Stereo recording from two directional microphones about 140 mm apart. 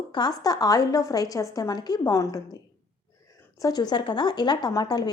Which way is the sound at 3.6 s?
30° left (ahead or behind).